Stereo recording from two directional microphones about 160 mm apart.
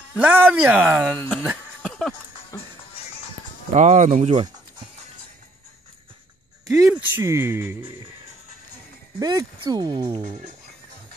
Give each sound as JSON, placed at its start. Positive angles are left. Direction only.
{"t": 0.2, "sound": "speech", "side_deg": -10}
{"t": 1.1, "sound": "speech", "side_deg": 10}
{"t": 1.8, "sound": "a sound", "side_deg": 0}
{"t": 2.5, "sound": "music", "side_deg": 15}
{"t": 3.7, "sound": "speech", "side_deg": -50}
{"t": 6.7, "sound": "speech", "side_deg": -15}
{"t": 9.2, "sound": "speech", "side_deg": -25}
{"t": 10.1, "sound": "speech", "side_deg": -45}